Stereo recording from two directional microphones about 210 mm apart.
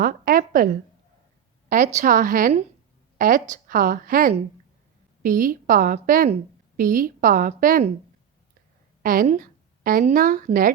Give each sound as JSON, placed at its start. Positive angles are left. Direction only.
{"t": 0.0, "sound": "a woman's voice", "side_deg": -45}
{"t": 9.0, "sound": "a woman's voice", "side_deg": -40}